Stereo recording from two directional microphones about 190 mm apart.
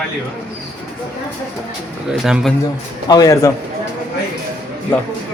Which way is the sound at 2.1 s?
5° right (ahead or behind).